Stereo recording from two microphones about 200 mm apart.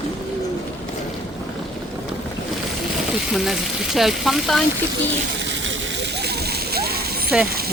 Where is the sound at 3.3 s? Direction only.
Centre (ahead or behind).